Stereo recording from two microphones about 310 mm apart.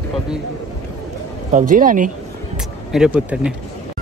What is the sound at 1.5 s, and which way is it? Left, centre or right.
Speech, right.